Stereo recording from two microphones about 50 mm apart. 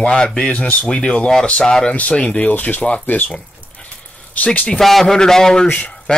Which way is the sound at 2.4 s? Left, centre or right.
Left.